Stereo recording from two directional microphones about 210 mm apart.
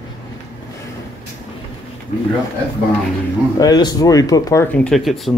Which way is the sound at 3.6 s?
20° left (ahead or behind).